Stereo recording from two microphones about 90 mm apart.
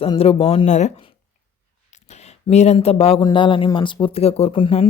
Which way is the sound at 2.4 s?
75° left (ahead or behind).